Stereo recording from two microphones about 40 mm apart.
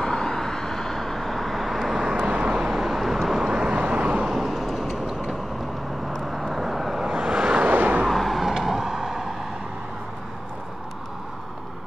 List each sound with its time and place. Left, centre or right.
0.0 s vehicle: centre
2.1 s vehicle: right
2.5 s vehicle: centre
3.4 s vehicle: right
3.7 s vehicle: right
4.3 s vehicle: centre
5.0 s vehicle: centre
6.2 s vehicle: centre
7.7 s vehicle: right
8.1 s vehicle: centre